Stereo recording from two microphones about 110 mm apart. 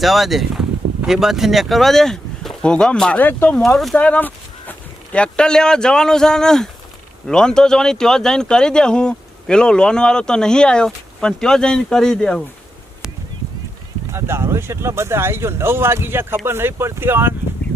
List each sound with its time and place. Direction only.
0.0 s speech: centre (ahead or behind); by 3.6 s 15° left (ahead or behind)
3.6 s speech: centre (ahead or behind)
3.9 s a sound: 15° left (ahead or behind)
5.1 s speech: 10° left (ahead or behind)
14.1 s speech: 25° right (ahead or behind)